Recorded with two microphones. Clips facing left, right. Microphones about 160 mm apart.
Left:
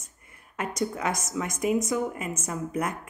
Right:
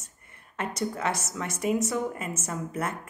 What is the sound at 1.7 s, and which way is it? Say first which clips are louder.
Speech: left 1 dB; 5° right (ahead or behind).